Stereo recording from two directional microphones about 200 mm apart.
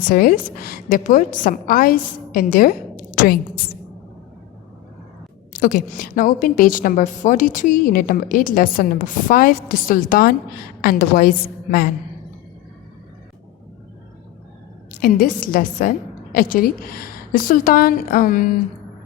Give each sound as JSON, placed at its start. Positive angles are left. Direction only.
{"t": 0.1, "sound": "a woman's voice", "side_deg": 45}
{"t": 5.5, "sound": "a woman's voice", "side_deg": 45}
{"t": 15.0, "sound": "a woman's voice", "side_deg": 45}